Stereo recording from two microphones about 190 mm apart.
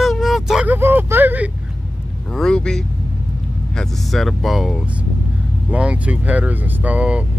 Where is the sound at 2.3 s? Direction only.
5° left (ahead or behind).